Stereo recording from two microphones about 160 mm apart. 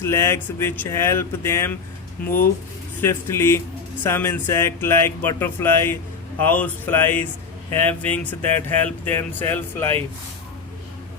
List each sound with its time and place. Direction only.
0.0 s speech: 15° left (ahead or behind)